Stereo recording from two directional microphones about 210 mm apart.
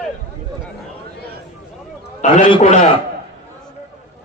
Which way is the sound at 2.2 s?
30° left (ahead or behind).